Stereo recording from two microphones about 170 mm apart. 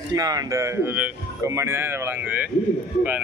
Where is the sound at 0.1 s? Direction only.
20° right (ahead or behind).